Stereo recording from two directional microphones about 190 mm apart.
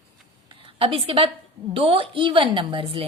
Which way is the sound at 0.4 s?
30° right (ahead or behind).